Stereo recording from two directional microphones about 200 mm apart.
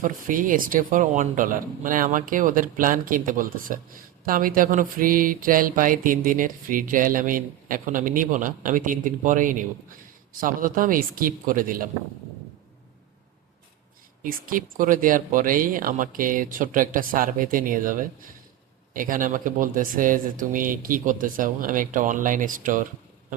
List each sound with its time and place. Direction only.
0.0 s mantra: 45° right (ahead or behind)
14.3 s mantra: 45° right (ahead or behind)
18.9 s speech: 40° right (ahead or behind)